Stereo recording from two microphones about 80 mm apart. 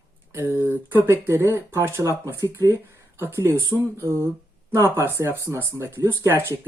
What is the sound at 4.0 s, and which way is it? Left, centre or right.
Speech, right.